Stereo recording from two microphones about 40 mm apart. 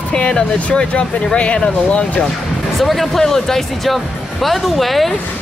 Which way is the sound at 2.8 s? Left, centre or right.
Centre.